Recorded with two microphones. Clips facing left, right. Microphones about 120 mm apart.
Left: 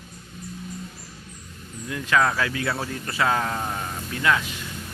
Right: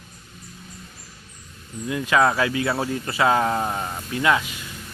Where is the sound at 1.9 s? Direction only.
15° right (ahead or behind).